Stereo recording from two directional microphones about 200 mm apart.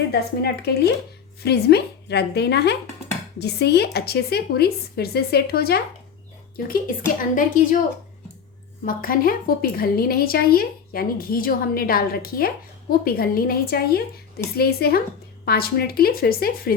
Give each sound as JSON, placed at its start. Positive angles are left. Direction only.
{"t": 0.1, "sound": "a woman's voice", "side_deg": 55}
{"t": 7.2, "sound": "a woman's voice", "side_deg": 40}
{"t": 8.8, "sound": "a woman's voice", "side_deg": 45}